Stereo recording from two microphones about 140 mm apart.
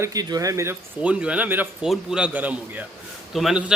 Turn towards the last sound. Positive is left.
turn(degrees=-5)  # may be behind; listen again after turning